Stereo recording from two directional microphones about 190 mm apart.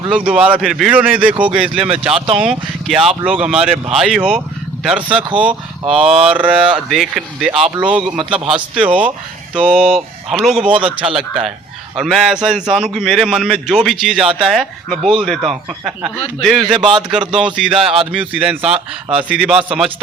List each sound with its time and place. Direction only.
0.1 s a man's voice: 5° right (ahead or behind)
2.1 s speech: 30° right (ahead or behind)
2.4 s a man's voice: 5° right (ahead or behind)
8.2 s speech: 30° right (ahead or behind)
8.5 s a man's voice: 5° right (ahead or behind)